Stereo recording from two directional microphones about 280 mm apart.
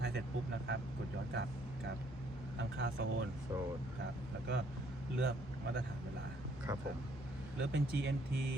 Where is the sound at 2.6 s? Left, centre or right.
Right.